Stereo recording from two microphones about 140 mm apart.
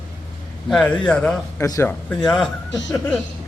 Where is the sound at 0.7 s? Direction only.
5° left (ahead or behind).